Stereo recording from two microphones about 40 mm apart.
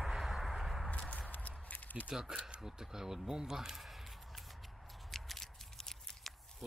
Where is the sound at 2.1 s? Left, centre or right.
Centre.